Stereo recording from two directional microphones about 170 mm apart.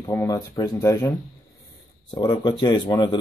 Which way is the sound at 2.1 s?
25° left (ahead or behind).